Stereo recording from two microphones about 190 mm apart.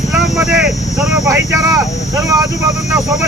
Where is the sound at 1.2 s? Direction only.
15° right (ahead or behind).